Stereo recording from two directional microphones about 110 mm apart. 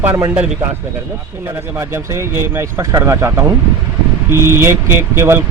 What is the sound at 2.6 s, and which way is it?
Speech, 25° right (ahead or behind).